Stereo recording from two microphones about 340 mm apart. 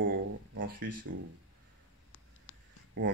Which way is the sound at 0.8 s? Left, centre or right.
Right.